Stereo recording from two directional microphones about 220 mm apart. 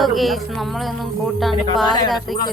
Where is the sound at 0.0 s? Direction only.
Centre (ahead or behind).